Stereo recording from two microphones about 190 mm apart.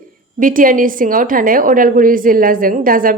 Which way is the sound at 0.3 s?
45° right (ahead or behind).